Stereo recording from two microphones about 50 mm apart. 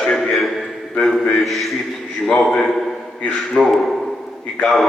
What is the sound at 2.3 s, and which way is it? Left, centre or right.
Speech, centre.